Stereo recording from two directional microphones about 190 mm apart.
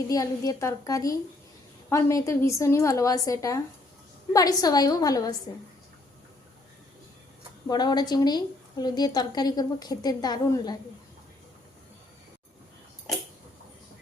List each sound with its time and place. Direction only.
0.1 s a woman's voice: 20° left (ahead or behind)
7.7 s a woman's voice: 20° left (ahead or behind)